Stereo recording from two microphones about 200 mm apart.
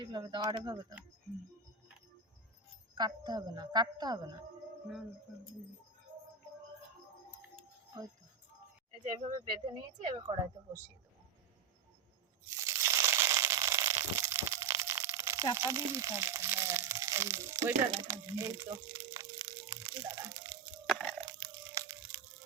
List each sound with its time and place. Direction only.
0.0 s a woman's voice: 20° right (ahead or behind)
2.9 s a woman's voice: 20° right (ahead or behind)
9.0 s a woman's voice: 25° right (ahead or behind)
12.6 s crushing: 15° right (ahead or behind)
15.5 s speech: 15° right (ahead or behind)
18.1 s a sound: 15° right (ahead or behind)
20.8 s a sound: 5° right (ahead or behind)
21.3 s crushing: 20° right (ahead or behind)